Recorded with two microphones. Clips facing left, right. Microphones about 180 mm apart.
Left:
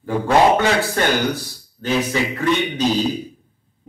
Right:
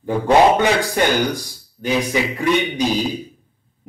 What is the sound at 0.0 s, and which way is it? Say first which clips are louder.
A man's voice: right 2 dB; 15° right (ahead or behind).